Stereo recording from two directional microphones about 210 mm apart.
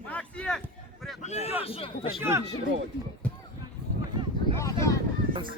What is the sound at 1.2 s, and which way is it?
Speech, 30° left (ahead or behind).